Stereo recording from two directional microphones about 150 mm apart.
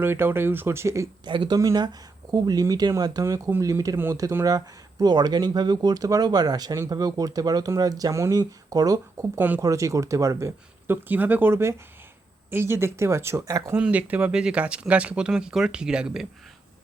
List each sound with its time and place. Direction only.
0.0 s speech: 15° right (ahead or behind)
1.3 s speech: 30° right (ahead or behind)
13.7 s speech: 10° right (ahead or behind)